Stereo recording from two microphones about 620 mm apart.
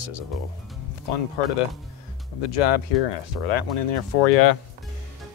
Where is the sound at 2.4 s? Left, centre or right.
Left.